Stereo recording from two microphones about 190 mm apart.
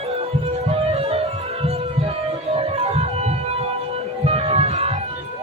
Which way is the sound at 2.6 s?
35° right (ahead or behind).